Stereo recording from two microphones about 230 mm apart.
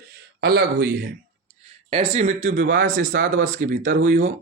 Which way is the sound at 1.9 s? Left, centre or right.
Right.